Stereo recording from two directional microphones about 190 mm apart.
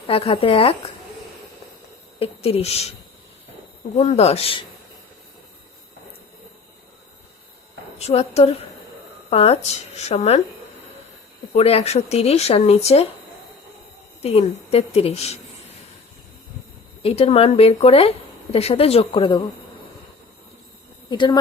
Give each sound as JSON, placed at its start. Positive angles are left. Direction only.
{"t": 0.1, "sound": "speech", "side_deg": 30}
{"t": 2.1, "sound": "speech", "side_deg": 30}
{"t": 3.9, "sound": "speech", "side_deg": 35}
{"t": 7.9, "sound": "speech", "side_deg": 35}
{"t": 11.5, "sound": "speech", "side_deg": 30}
{"t": 14.2, "sound": "speech", "side_deg": 30}
{"t": 17.0, "sound": "speech", "side_deg": 30}
{"t": 21.1, "sound": "speech", "side_deg": 25}